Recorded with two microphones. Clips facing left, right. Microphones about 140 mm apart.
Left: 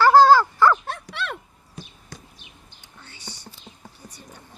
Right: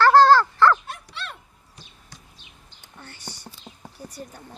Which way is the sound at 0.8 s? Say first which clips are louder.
Left 6 dB; 65° left (ahead or behind).